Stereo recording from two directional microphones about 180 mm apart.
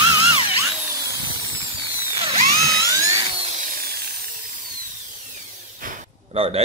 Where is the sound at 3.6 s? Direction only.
50° right (ahead or behind).